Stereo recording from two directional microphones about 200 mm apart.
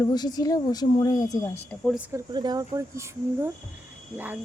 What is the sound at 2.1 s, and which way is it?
Speech, 20° right (ahead or behind).